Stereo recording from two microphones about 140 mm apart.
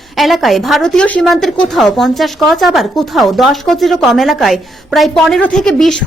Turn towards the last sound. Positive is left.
turn(degrees=5)  # may be behind; listen again after turning